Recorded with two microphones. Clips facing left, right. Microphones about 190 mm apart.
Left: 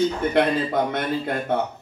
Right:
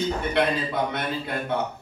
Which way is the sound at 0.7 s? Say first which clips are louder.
Left 4 dB; 45° left (ahead or behind).